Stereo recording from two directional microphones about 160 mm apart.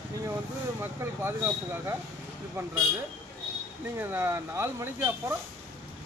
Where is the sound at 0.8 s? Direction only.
15° right (ahead or behind).